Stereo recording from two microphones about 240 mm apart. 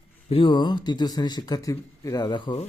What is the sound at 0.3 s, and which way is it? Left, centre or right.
Speech, left.